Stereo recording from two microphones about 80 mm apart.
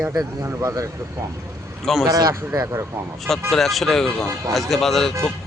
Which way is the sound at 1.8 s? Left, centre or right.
Centre.